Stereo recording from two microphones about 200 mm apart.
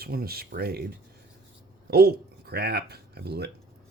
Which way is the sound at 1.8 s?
50° right (ahead or behind).